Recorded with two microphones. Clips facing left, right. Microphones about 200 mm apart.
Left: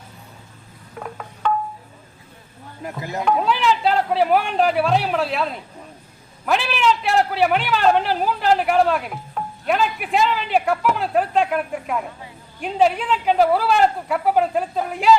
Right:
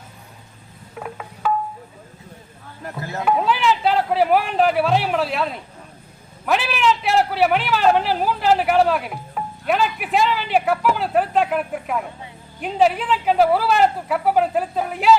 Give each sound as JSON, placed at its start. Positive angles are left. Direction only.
{"t": 0.9, "sound": "a sound", "side_deg": -5}
{"t": 3.0, "sound": "speech", "side_deg": 15}
{"t": 3.2, "sound": "a man's voice", "side_deg": 0}